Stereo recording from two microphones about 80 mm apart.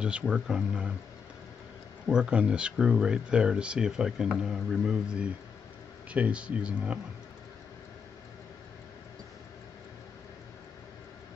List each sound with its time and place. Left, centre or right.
0.0 s speech: centre
2.0 s speech: centre